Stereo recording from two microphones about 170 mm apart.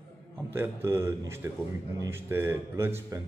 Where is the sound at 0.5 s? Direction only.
15° right (ahead or behind).